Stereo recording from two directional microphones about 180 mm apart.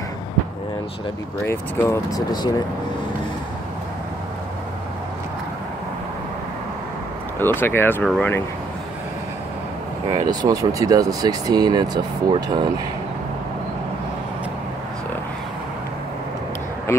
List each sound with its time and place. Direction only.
1.5 s speech: 15° left (ahead or behind)
7.3 s speech: 10° left (ahead or behind)
8.0 s speech: centre (ahead or behind)
10.0 s speech: 20° right (ahead or behind)